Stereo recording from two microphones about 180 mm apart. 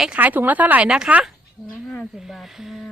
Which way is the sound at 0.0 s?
10° right (ahead or behind).